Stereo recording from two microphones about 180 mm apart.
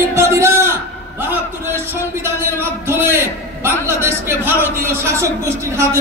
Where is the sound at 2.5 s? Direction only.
15° right (ahead or behind).